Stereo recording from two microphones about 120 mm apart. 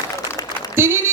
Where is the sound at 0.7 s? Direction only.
20° right (ahead or behind).